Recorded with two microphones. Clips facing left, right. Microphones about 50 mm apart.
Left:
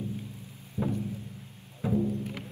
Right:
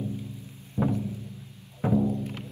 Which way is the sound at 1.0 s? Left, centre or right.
Left.